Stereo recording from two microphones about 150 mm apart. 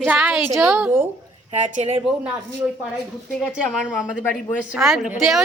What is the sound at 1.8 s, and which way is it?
Speech, 45° right (ahead or behind).